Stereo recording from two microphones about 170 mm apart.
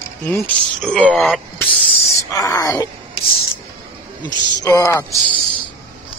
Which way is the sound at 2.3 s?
20° left (ahead or behind).